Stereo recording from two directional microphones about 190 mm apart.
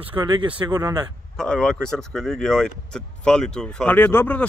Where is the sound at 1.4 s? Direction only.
5° left (ahead or behind).